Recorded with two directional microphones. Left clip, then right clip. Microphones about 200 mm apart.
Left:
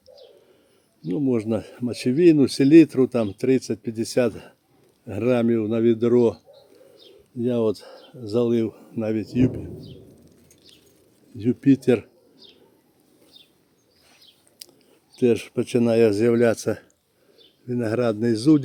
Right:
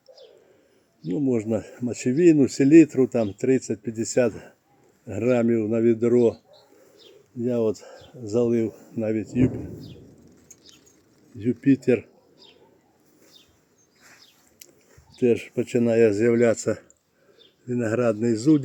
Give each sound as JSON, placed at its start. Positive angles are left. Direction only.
{"t": 1.3, "sound": "speech", "side_deg": 5}
{"t": 7.4, "sound": "speech", "side_deg": 20}
{"t": 7.7, "sound": "speech", "side_deg": 10}
{"t": 11.3, "sound": "speech", "side_deg": 20}
{"t": 15.2, "sound": "speech", "side_deg": 15}